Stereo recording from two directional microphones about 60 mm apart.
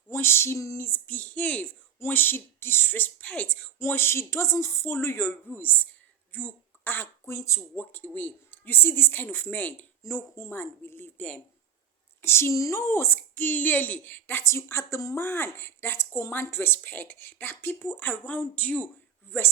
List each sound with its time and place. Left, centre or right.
0.1 s a sound: left
0.8 s speech: left
2.0 s a woman's voice: left
3.8 s a woman's voice: left
10.5 s a woman's voice: left
12.2 s a woman's voice: left
14.5 s speech: left
15.2 s a woman's voice: left
19.3 s a woman's voice: left